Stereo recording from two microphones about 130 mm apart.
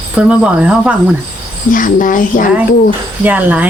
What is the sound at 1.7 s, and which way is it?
Speech, 90° left.